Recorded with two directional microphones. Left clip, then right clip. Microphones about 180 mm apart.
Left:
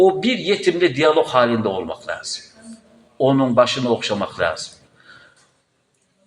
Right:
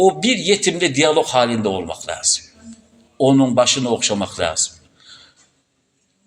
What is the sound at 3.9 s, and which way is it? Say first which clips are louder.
Speech: right 1 dB; 25° right (ahead or behind).